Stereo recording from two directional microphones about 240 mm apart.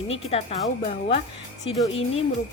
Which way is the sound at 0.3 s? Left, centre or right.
Left.